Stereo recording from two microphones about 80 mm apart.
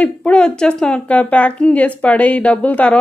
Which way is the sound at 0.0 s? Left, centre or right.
Centre.